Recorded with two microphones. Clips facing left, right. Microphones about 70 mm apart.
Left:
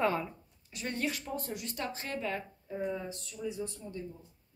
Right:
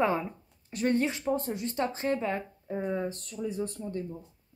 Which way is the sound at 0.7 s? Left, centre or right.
Right.